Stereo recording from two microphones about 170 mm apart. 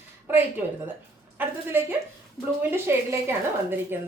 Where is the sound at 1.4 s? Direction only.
10° right (ahead or behind).